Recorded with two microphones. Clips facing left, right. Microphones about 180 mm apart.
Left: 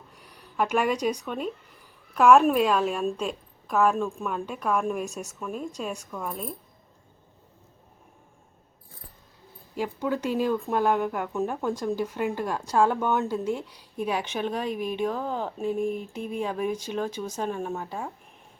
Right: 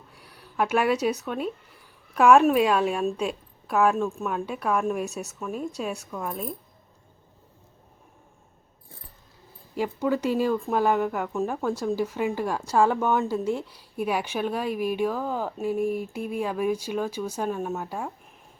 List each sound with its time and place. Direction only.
0.1 s a woman's voice: 10° right (ahead or behind)
9.7 s speech: 10° right (ahead or behind)